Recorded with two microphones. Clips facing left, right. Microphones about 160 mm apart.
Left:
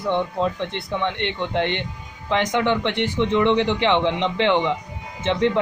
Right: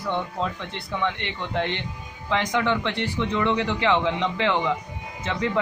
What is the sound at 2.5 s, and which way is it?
A man's voice, 20° left (ahead or behind).